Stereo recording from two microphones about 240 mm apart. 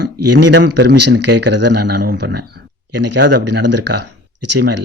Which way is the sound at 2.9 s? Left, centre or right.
Right.